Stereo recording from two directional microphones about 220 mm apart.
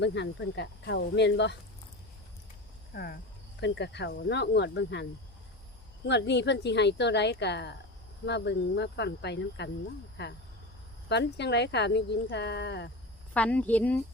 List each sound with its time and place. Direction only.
0.0 s speech: 50° left (ahead or behind)
2.9 s speech: 45° left (ahead or behind)
6.1 s speech: 50° left (ahead or behind)
13.3 s a woman's voice: 5° left (ahead or behind)